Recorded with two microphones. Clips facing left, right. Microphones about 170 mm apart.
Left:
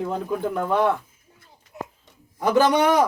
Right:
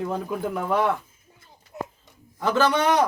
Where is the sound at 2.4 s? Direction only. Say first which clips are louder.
Left 3 dB; 15° left (ahead or behind).